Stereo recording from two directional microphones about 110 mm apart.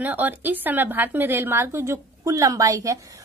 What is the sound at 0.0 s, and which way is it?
A woman's voice, 15° right (ahead or behind).